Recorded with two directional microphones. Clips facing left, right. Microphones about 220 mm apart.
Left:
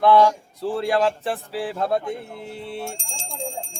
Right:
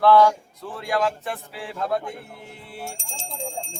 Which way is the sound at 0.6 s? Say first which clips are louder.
Left 4 dB; 30° left (ahead or behind).